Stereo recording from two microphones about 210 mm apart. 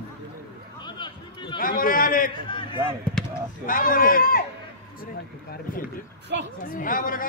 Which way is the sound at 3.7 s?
40° left (ahead or behind).